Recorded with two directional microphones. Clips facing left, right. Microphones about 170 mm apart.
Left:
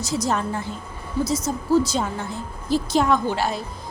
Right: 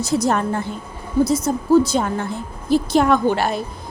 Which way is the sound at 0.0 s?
55° right (ahead or behind).